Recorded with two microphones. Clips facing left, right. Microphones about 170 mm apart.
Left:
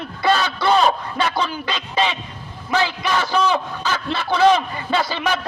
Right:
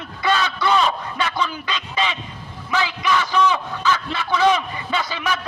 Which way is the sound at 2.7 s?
35° left (ahead or behind).